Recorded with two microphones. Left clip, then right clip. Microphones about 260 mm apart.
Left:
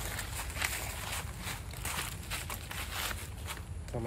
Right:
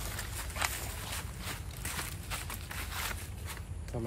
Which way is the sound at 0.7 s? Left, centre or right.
Left.